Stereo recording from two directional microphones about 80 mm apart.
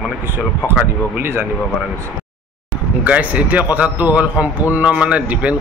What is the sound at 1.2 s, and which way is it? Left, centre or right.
Speech, right.